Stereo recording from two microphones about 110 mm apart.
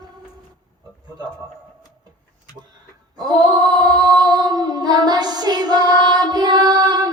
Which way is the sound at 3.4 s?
40° right (ahead or behind).